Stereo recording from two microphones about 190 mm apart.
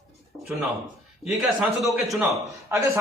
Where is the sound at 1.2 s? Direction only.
5° right (ahead or behind).